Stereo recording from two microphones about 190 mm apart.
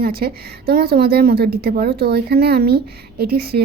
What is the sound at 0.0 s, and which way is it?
A woman's voice, 55° right (ahead or behind).